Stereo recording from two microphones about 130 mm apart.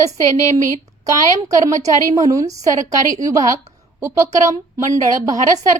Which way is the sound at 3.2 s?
25° right (ahead or behind).